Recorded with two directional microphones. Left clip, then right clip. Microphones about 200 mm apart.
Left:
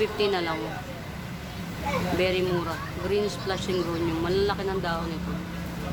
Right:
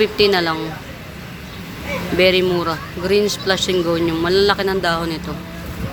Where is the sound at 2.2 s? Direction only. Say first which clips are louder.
Right 14 dB; 30° right (ahead or behind).